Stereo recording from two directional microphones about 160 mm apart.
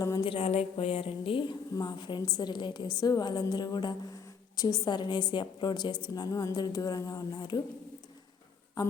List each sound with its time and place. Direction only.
0.2 s a woman's voice: 35° left (ahead or behind)